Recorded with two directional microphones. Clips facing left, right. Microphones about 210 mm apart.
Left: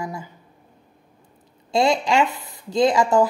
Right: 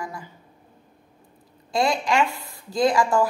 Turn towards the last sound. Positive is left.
turn(degrees=20)  # may be behind; listen again after turning